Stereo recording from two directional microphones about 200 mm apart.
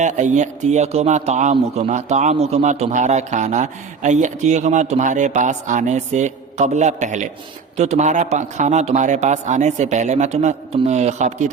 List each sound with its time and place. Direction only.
0.0 s a man's voice: 35° right (ahead or behind)